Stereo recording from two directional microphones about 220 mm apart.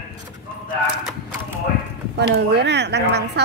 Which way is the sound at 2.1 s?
50° right (ahead or behind).